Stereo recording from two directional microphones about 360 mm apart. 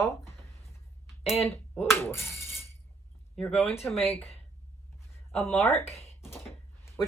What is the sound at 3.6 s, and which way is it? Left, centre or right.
Speech, centre.